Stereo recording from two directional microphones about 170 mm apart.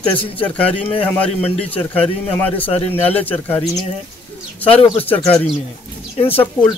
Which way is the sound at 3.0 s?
10° left (ahead or behind).